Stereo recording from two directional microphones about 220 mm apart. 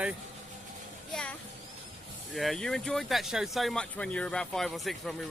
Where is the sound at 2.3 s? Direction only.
Centre (ahead or behind).